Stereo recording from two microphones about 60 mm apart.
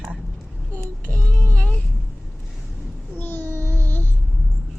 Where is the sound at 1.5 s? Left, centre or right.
Left.